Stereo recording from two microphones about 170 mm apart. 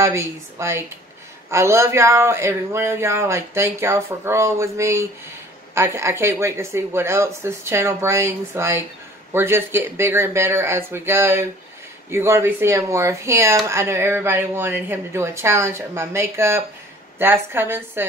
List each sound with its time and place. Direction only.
0.0 s speech: 15° right (ahead or behind)